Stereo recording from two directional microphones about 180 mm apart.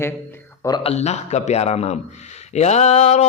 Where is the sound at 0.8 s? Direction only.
35° left (ahead or behind).